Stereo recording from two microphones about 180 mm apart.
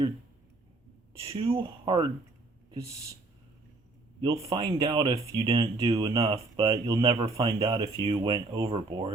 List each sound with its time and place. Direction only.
1.2 s speech: 30° right (ahead or behind)
4.2 s speech: 20° right (ahead or behind)
6.7 s speech: 20° right (ahead or behind)
7.1 s a man's voice: 35° right (ahead or behind)
7.4 s speech: 20° right (ahead or behind)